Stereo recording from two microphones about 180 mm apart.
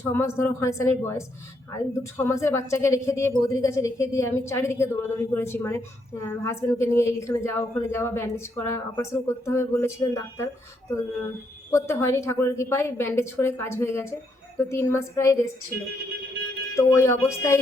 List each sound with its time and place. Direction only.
0.0 s a woman's voice: 15° left (ahead or behind)
11.7 s a woman's voice: 15° left (ahead or behind)
16.7 s a woman's voice: 15° left (ahead or behind)